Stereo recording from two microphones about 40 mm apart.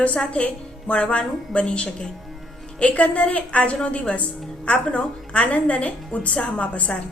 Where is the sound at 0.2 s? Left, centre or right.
Left.